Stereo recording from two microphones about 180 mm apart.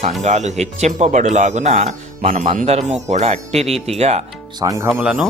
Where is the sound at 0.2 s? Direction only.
40° right (ahead or behind).